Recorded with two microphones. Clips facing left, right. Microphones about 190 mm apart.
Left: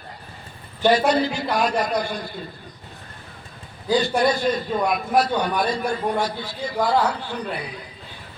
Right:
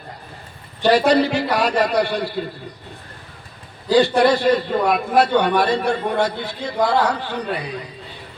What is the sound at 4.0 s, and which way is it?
A man's voice, 70° right (ahead or behind).